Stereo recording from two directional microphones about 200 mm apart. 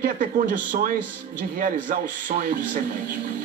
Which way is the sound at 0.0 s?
40° right (ahead or behind).